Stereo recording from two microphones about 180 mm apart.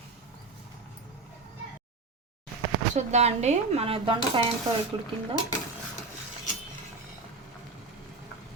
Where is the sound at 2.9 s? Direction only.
40° right (ahead or behind).